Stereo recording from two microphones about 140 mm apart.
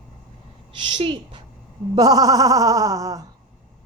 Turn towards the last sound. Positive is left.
turn(degrees=-25)  # may be behind; listen again after turning